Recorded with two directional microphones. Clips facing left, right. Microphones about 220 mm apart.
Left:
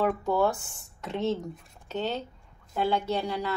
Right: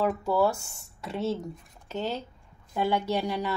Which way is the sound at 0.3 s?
5° right (ahead or behind).